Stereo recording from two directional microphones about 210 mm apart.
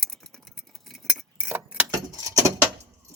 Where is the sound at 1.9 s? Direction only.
15° right (ahead or behind).